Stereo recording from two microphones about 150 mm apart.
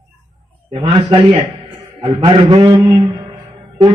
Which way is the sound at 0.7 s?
35° right (ahead or behind).